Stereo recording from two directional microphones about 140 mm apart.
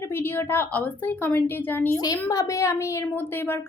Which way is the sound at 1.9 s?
25° left (ahead or behind).